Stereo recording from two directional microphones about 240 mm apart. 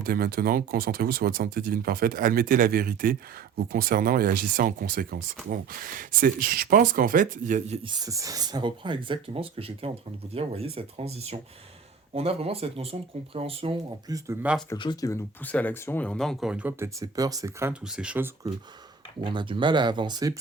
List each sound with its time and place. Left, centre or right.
0.0 s speech: right
7.9 s speech: centre
14.3 s speech: centre
14.7 s speech: centre
19.2 s speech: centre